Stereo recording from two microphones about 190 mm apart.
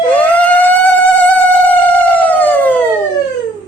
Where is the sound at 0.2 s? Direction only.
10° left (ahead or behind).